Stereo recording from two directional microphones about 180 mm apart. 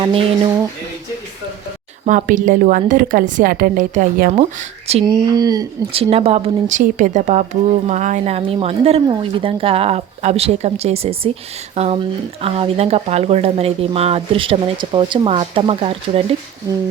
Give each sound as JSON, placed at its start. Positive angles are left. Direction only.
{"t": 0.0, "sound": "speech", "side_deg": -30}
{"t": 2.0, "sound": "a woman's voice", "side_deg": -45}
{"t": 5.0, "sound": "speech", "side_deg": -20}
{"t": 5.9, "sound": "speech", "side_deg": -30}